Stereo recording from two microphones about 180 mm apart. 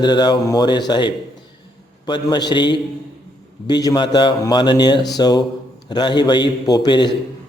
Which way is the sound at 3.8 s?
25° left (ahead or behind).